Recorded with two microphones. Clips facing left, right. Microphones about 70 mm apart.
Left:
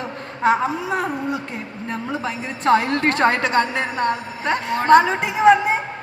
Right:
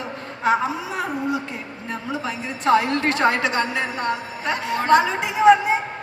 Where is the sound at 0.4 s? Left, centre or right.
Left.